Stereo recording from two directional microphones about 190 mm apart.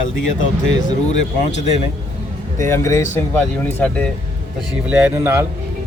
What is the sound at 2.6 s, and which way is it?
Speech, 15° left (ahead or behind).